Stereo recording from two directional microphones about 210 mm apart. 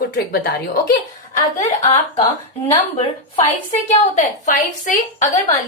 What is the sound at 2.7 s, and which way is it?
A woman's voice, 25° left (ahead or behind).